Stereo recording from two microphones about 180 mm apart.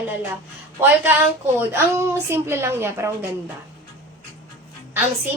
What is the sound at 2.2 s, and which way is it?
A woman's voice, 15° right (ahead or behind).